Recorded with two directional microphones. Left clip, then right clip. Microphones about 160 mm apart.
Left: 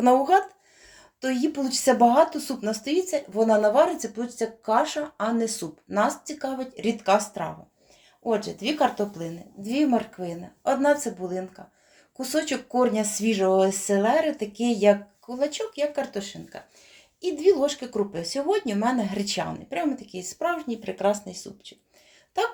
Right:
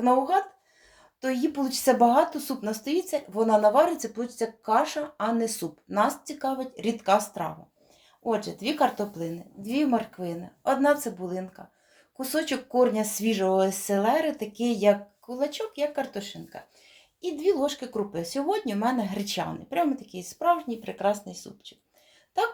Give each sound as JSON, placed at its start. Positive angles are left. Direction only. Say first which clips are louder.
{"t": 0.0, "sound": "speech", "louder": "left 4 dB", "side_deg": 45}
{"t": 1.2, "sound": "speech", "louder": "left 1 dB", "side_deg": 15}